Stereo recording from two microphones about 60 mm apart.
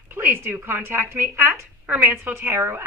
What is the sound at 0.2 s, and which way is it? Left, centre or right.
A woman's voice, right.